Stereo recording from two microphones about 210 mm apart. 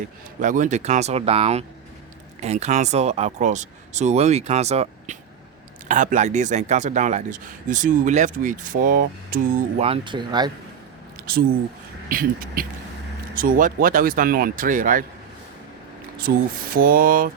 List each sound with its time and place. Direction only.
0.3 s speech: 40° right (ahead or behind); by 10.5 s 20° right (ahead or behind)
11.2 s a sound: 45° right (ahead or behind)
12.0 s speech: 45° right (ahead or behind)
16.1 s speech: 45° right (ahead or behind)